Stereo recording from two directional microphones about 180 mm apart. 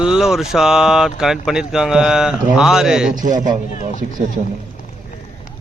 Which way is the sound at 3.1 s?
45° right (ahead or behind).